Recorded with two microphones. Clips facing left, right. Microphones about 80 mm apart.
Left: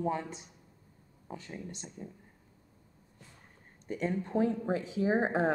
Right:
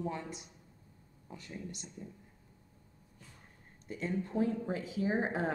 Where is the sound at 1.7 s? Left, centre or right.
Left.